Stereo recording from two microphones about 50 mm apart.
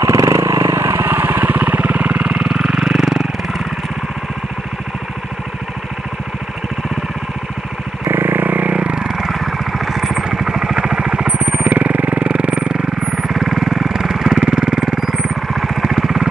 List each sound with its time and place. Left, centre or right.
0.0 s vehicle: right; by 3.6 s centre
8.0 s vehicle: right; by 9.3 s centre
9.3 s vehicle: centre